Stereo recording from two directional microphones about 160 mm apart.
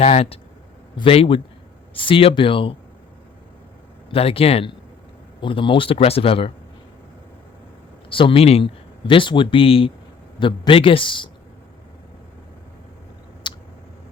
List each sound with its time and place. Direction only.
0.0 s speech: 40° left (ahead or behind)
4.1 s speech: 35° left (ahead or behind)
8.1 s speech: 35° left (ahead or behind)
13.5 s a sound: 30° left (ahead or behind)